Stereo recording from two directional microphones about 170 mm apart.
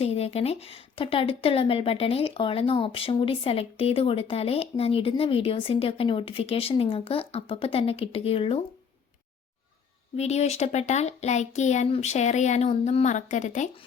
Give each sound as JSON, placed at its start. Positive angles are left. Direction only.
{"t": 0.0, "sound": "speech", "side_deg": 35}
{"t": 10.2, "sound": "speech", "side_deg": 40}